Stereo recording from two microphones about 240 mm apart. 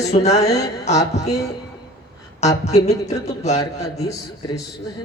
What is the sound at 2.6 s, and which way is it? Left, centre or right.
Speech, left.